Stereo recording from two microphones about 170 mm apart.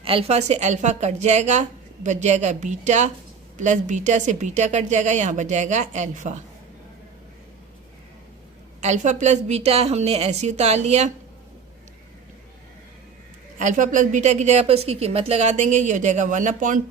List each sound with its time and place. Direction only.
0.0 s a woman's voice: 35° right (ahead or behind)
8.8 s a woman's voice: 45° right (ahead or behind)
13.6 s a woman's voice: 50° right (ahead or behind)